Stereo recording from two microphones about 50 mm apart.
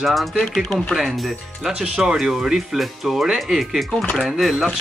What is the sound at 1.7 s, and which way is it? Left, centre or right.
Speech, centre.